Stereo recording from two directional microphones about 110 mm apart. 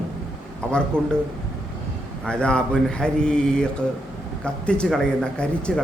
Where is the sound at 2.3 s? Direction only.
10° left (ahead or behind).